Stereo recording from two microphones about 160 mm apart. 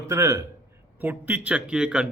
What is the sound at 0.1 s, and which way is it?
A man's voice, 20° right (ahead or behind).